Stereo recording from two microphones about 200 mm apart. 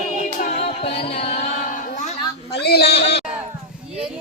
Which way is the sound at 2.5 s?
55° left (ahead or behind).